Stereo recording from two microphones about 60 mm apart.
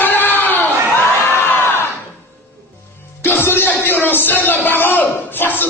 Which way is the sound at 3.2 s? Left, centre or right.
Left.